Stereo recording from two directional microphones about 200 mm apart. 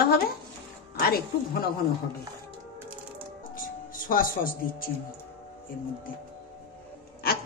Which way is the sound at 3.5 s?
45° left (ahead or behind).